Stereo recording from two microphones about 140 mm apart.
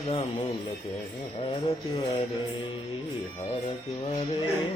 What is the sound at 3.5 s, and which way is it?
Music, 40° left (ahead or behind).